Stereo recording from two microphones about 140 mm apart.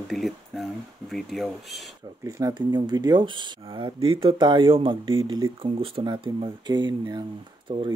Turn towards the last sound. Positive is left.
turn(degrees=-35)  # may be behind; listen again after turning